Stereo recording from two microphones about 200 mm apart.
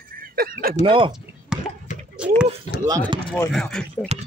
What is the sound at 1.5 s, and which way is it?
Cough, 5° right (ahead or behind).